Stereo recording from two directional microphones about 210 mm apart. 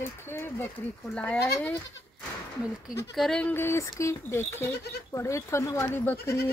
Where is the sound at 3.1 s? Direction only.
Centre (ahead or behind).